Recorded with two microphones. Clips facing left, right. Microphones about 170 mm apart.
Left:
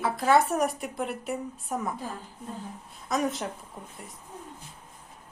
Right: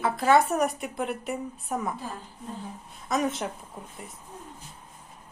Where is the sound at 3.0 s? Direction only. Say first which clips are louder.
Right 1 dB; centre (ahead or behind).